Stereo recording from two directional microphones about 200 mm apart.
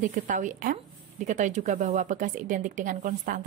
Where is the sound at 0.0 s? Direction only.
40° right (ahead or behind).